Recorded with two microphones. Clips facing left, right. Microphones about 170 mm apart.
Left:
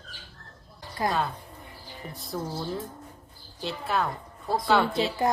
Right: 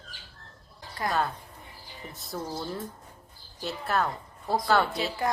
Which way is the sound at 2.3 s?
Centre (ahead or behind).